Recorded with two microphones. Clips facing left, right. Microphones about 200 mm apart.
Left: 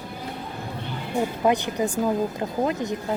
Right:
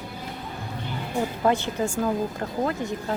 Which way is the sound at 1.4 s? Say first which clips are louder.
Left 1 dB; 15° left (ahead or behind).